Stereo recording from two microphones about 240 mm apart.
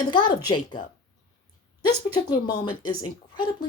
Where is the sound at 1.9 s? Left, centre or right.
Centre.